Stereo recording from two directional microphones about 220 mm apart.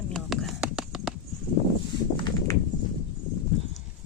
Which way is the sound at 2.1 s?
20° left (ahead or behind).